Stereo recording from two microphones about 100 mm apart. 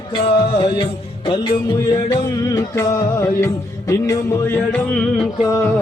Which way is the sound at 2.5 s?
30° left (ahead or behind).